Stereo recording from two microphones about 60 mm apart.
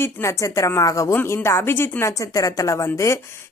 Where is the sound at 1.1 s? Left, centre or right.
Left.